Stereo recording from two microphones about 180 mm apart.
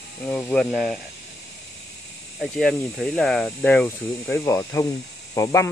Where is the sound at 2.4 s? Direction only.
Centre (ahead or behind).